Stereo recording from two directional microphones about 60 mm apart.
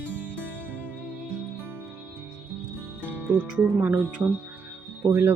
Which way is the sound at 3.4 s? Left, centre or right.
Right.